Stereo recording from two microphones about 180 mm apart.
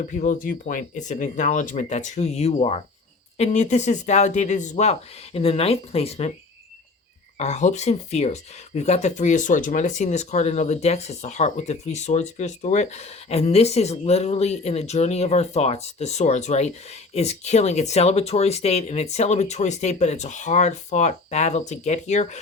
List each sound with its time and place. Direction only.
0.0 s speech: 45° left (ahead or behind)
7.3 s speech: 40° left (ahead or behind)